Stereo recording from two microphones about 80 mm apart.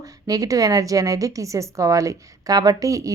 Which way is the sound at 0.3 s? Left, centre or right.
Right.